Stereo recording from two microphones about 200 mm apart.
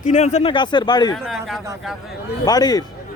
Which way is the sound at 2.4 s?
20° left (ahead or behind).